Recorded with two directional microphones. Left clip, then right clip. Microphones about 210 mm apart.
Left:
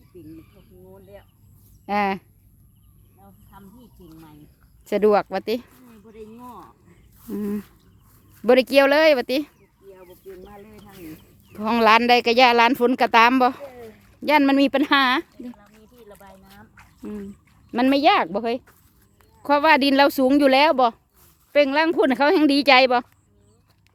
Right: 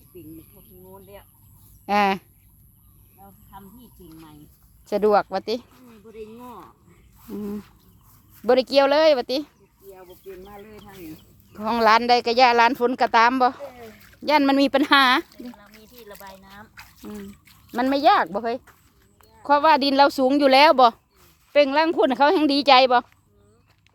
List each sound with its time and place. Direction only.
0.1 s a sound: 10° left (ahead or behind)
0.9 s speech: centre (ahead or behind)
4.1 s speech: 5° left (ahead or behind)
4.9 s speech: 20° left (ahead or behind)
5.7 s a sound: 5° left (ahead or behind)
7.3 s speech: 25° left (ahead or behind)
9.9 s a sound: centre (ahead or behind)
11.1 s speech: 25° left (ahead or behind); by 15.3 s 5° left (ahead or behind)
15.5 s a sound: 40° right (ahead or behind)
17.7 s speech: 25° left (ahead or behind)
20.5 s speech: centre (ahead or behind)
21.5 s speech: 10° left (ahead or behind)